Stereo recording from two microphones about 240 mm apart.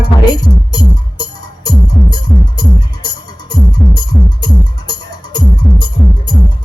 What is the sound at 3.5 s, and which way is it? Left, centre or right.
Music, centre.